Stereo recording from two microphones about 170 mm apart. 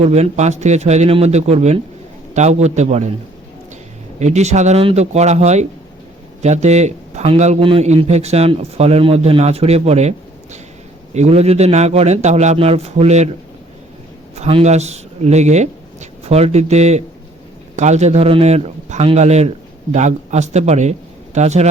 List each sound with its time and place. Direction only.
0.0 s a man's voice: 40° right (ahead or behind)
4.2 s a man's voice: 40° right (ahead or behind)
14.3 s a man's voice: 40° right (ahead or behind)